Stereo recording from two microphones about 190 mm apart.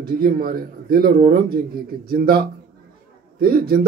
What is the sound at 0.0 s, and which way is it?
A man's voice, 50° right (ahead or behind).